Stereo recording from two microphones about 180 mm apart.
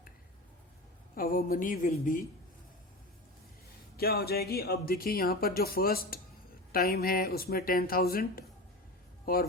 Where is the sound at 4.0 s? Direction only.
60° left (ahead or behind).